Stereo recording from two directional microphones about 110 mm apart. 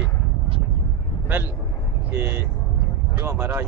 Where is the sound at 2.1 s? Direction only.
20° right (ahead or behind).